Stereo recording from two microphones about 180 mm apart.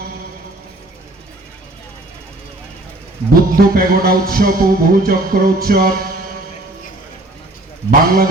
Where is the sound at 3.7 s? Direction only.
55° right (ahead or behind).